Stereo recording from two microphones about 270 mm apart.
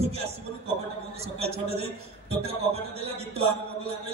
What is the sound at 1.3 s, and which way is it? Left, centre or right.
Speech, right.